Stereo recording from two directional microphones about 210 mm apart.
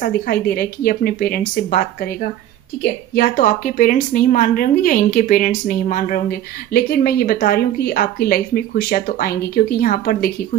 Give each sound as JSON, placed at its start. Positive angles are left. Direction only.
{"t": 0.0, "sound": "a woman's voice", "side_deg": 45}